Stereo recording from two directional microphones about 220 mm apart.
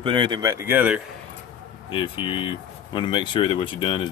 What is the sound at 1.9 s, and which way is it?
Speech, 25° left (ahead or behind).